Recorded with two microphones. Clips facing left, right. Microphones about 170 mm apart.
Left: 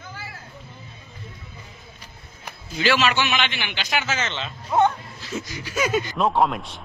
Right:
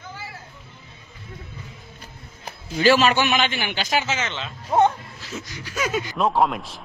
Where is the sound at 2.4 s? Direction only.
40° right (ahead or behind).